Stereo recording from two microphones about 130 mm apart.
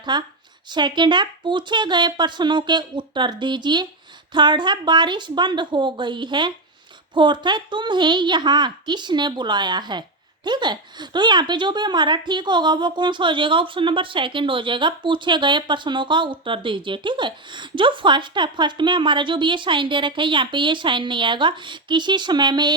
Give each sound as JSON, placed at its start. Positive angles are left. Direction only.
{"t": 0.0, "sound": "a woman's voice", "side_deg": -35}